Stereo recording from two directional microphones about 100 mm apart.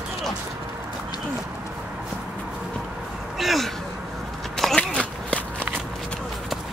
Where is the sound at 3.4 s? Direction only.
Centre (ahead or behind).